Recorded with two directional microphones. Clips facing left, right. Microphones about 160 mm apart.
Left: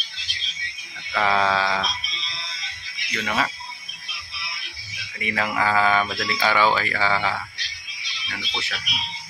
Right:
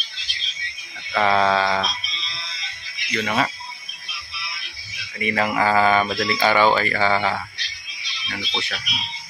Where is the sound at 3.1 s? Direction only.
Centre (ahead or behind).